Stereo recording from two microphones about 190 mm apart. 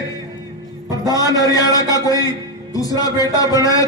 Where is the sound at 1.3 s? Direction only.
20° left (ahead or behind).